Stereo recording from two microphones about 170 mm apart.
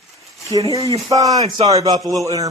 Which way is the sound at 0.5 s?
20° right (ahead or behind).